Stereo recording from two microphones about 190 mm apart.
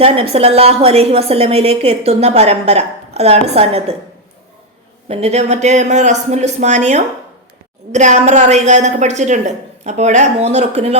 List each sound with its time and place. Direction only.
0.0 s a woman's voice: 30° right (ahead or behind)
5.0 s a woman's voice: 35° right (ahead or behind)